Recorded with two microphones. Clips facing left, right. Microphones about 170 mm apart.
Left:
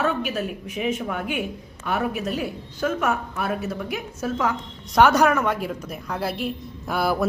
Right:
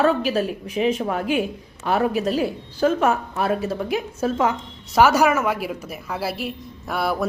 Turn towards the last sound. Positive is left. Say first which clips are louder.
# left 1 dB
turn(degrees=0)  # may be behind; listen again after turning